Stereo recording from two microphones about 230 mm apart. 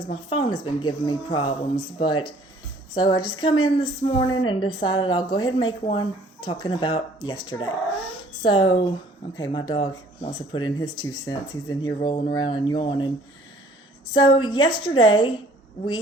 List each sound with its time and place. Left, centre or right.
0.0 s speech: left
14.1 s speech: centre